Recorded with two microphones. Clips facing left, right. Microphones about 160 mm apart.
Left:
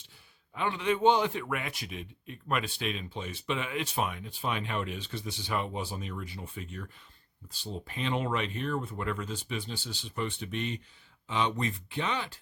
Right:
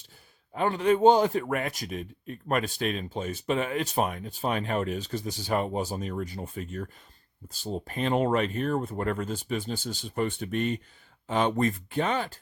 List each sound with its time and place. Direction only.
0.5 s a man's voice: 45° right (ahead or behind)